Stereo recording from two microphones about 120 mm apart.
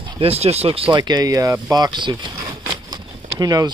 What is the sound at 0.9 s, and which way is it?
Speech, 35° right (ahead or behind).